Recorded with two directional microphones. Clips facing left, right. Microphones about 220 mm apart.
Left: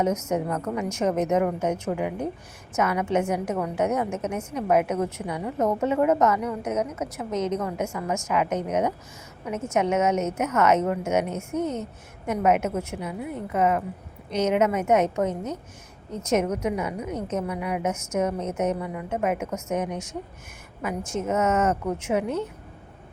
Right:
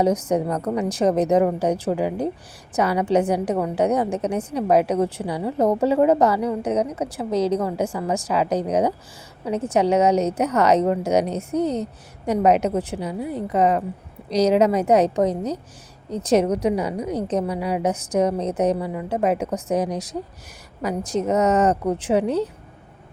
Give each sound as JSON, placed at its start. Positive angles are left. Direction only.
{"t": 0.0, "sound": "a woman's voice", "side_deg": -35}